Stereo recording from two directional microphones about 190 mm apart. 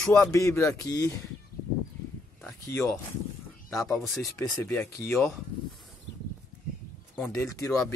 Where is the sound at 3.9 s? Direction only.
Centre (ahead or behind).